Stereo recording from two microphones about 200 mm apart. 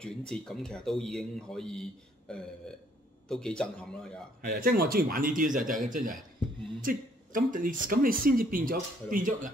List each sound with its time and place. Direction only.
0.3 s speech: 5° left (ahead or behind)
4.4 s speech: 50° right (ahead or behind)
6.8 s speech: 40° right (ahead or behind)